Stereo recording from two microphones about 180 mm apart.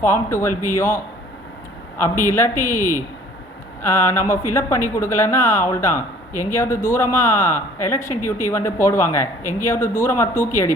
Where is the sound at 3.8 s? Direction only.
15° left (ahead or behind).